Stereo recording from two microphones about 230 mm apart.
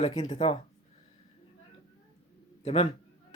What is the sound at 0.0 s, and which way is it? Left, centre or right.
Speech, centre.